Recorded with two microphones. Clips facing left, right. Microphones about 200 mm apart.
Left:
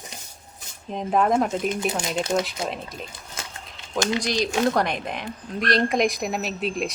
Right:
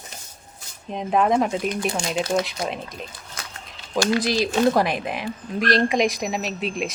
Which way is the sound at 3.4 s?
25° left (ahead or behind).